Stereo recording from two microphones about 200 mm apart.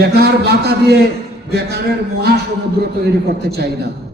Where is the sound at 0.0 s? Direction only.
55° right (ahead or behind).